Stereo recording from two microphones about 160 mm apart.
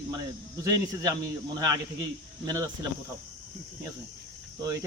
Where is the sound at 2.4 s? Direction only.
25° right (ahead or behind).